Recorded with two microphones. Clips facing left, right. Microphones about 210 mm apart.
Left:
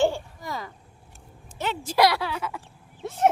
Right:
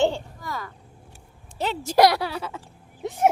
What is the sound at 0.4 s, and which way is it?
Vehicle, 20° left (ahead or behind).